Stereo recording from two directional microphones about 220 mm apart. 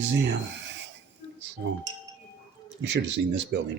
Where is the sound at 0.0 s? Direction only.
55° right (ahead or behind).